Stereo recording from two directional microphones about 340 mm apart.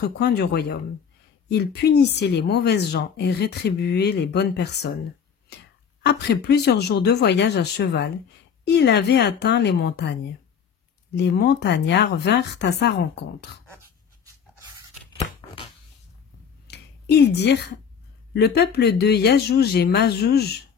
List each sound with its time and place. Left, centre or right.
0.0 s speech: left
6.0 s speech: left
11.1 s speech: left
16.6 s finger snapping: left
18.3 s speech: left